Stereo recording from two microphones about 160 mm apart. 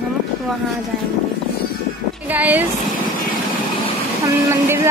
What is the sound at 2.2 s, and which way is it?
Speech, 10° right (ahead or behind).